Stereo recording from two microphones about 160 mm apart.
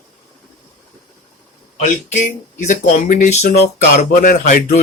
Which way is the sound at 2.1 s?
50° left (ahead or behind).